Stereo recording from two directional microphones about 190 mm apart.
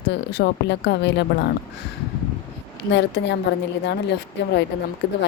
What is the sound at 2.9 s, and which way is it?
A woman's voice, 65° left (ahead or behind).